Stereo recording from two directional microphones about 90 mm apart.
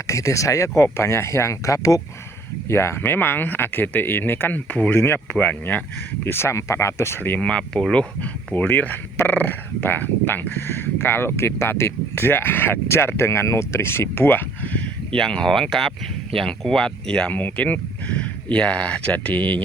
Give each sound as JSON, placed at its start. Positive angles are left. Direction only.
{"t": 0.1, "sound": "speech", "side_deg": 35}
{"t": 8.5, "sound": "speech", "side_deg": 20}